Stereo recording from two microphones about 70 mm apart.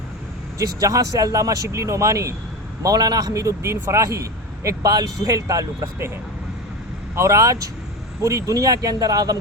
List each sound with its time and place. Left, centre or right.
0.8 s a man's voice: right
2.8 s a man's voice: right
7.2 s a man's voice: right